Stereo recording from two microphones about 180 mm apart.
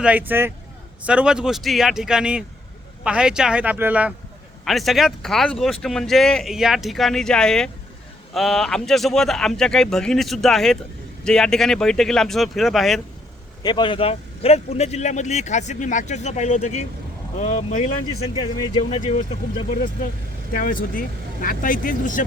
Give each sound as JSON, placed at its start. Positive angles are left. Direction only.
{"t": 0.0, "sound": "a man's voice", "side_deg": -10}
{"t": 13.6, "sound": "speech", "side_deg": 25}
{"t": 18.3, "sound": "speech", "side_deg": 25}
{"t": 20.5, "sound": "speech", "side_deg": 50}